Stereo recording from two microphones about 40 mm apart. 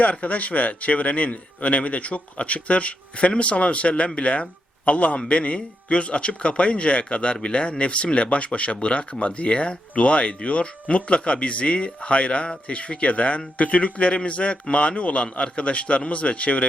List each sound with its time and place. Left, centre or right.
0.0 s speech: left